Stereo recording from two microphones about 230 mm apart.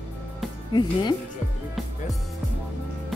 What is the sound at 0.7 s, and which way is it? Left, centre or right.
Speech, centre.